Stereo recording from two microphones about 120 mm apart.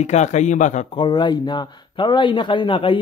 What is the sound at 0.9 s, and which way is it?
A man's voice, 40° left (ahead or behind).